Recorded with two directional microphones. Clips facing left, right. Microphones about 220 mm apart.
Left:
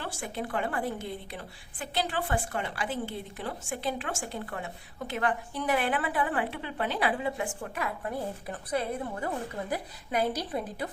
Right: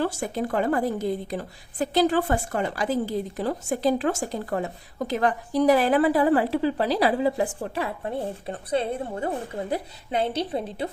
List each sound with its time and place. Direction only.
0.0 s a woman's voice: 40° right (ahead or behind); by 10.8 s 25° right (ahead or behind)